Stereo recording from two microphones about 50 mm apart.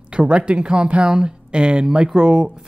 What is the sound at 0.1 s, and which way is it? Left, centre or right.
Speech, right.